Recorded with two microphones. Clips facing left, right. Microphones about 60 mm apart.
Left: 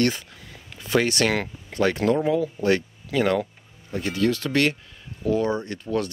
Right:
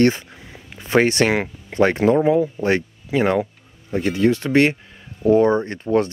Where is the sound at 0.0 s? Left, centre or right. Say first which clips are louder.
Right 6 dB; right.